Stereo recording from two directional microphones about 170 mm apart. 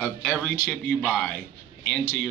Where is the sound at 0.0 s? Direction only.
5° left (ahead or behind).